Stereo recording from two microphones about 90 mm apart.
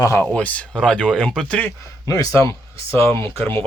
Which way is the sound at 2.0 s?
40° left (ahead or behind).